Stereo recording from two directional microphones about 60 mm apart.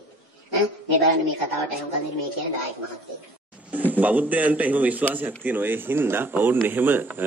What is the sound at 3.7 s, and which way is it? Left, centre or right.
A man's voice, right.